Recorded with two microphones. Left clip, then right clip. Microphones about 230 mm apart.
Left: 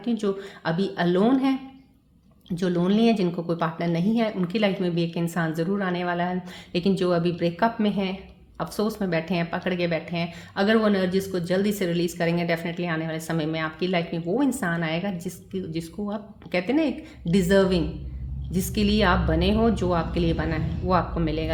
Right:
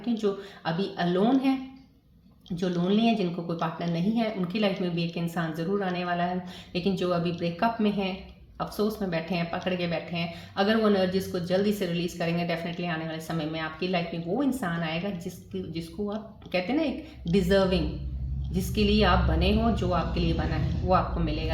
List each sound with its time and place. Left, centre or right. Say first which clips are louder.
0.2 s speech: left 2 dB; left
2.6 s speech: left 4 dB; left